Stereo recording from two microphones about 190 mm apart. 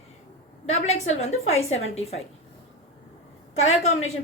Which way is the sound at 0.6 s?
35° left (ahead or behind).